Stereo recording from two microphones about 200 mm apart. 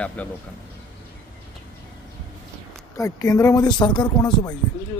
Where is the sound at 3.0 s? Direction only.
15° left (ahead or behind).